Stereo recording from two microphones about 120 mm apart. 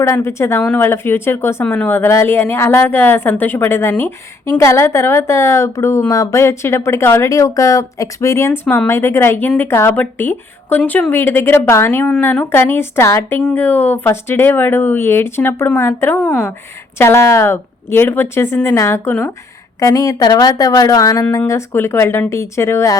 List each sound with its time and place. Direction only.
0.0 s a woman's voice: 25° left (ahead or behind)